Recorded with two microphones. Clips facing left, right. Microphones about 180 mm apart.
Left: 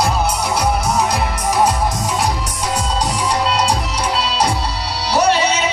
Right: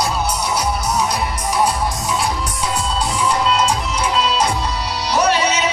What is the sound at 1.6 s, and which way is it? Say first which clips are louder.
Music: left 2 dB; 45° left (ahead or behind).